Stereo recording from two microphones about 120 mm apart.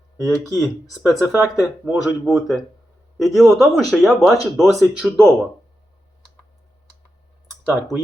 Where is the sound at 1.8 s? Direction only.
Centre (ahead or behind).